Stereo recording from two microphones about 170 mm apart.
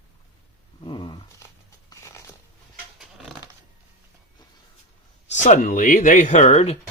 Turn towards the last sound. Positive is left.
turn(degrees=40)  # may be behind; listen again after turning